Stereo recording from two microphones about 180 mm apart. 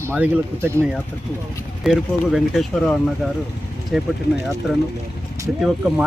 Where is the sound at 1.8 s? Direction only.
Centre (ahead or behind).